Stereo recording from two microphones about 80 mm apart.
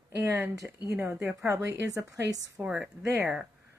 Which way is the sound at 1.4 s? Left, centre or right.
Right.